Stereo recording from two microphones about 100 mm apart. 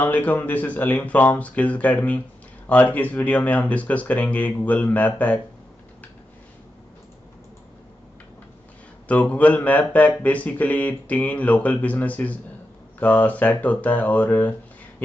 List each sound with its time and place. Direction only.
0.0 s speech: 20° left (ahead or behind)
9.0 s speech: 15° left (ahead or behind)